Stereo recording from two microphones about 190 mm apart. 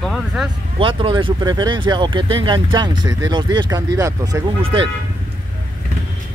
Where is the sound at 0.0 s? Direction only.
Centre (ahead or behind).